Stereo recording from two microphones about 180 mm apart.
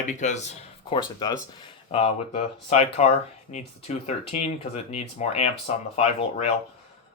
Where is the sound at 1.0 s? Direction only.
25° left (ahead or behind).